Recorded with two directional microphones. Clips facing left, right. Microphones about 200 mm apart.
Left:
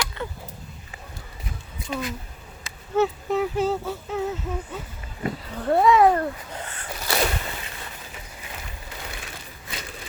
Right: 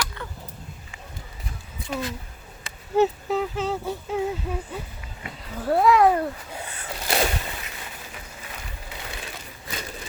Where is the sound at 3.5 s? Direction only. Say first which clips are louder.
Left 4 dB; 5° left (ahead or behind).